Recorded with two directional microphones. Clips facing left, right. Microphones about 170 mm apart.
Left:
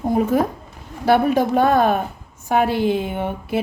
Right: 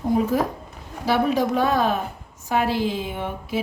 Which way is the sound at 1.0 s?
55° left (ahead or behind).